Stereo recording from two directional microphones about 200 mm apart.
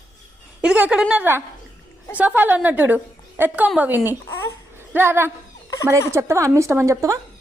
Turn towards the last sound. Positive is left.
turn(degrees=-15)  # may be behind; listen again after turning